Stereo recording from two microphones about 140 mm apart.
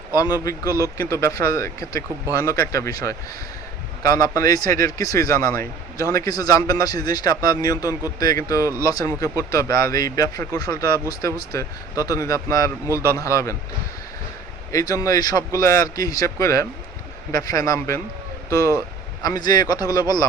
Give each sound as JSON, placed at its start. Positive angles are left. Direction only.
{"t": 1.1, "sound": "speech", "side_deg": 20}
{"t": 14.7, "sound": "speech", "side_deg": 25}